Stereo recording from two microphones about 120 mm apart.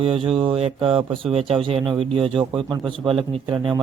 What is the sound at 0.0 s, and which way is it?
Speech, 50° right (ahead or behind).